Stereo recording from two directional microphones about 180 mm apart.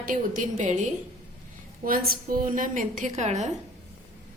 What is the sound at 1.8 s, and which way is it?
A woman's voice, 55° right (ahead or behind).